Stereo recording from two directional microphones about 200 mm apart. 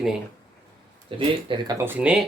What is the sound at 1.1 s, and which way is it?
Speech, 25° right (ahead or behind).